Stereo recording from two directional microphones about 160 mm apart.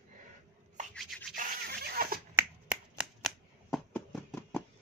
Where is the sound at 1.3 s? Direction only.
70° right (ahead or behind).